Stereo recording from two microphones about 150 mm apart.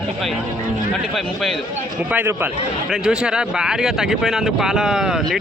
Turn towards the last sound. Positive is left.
turn(degrees=0)  # may be behind; listen again after turning